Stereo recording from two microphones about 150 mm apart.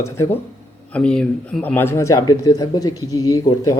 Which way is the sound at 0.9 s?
5° left (ahead or behind).